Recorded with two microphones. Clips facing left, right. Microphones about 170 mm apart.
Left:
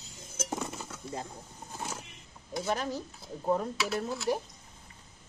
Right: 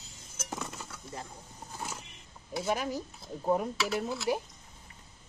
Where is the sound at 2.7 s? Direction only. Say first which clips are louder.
Right 1 dB; 10° right (ahead or behind).